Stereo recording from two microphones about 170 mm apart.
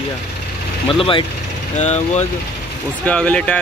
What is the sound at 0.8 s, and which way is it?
Speech, 30° left (ahead or behind).